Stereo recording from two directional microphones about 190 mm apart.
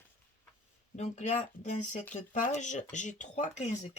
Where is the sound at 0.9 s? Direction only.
35° left (ahead or behind).